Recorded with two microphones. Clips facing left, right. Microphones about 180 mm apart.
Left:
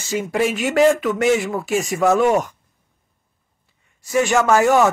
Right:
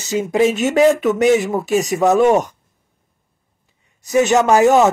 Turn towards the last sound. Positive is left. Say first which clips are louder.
# right 3 dB
turn(degrees=-20)  # may be behind; listen again after turning